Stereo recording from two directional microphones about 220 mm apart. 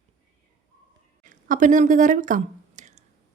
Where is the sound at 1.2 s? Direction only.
35° right (ahead or behind).